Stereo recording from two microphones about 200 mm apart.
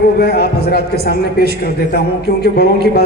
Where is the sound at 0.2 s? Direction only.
55° left (ahead or behind).